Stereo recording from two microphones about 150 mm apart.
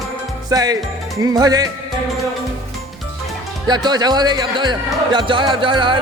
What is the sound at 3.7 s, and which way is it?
Speech, 30° right (ahead or behind).